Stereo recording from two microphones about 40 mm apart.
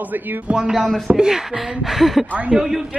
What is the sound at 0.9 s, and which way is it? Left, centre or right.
Speech, centre.